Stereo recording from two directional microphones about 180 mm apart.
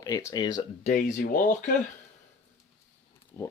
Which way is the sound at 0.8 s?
50° left (ahead or behind).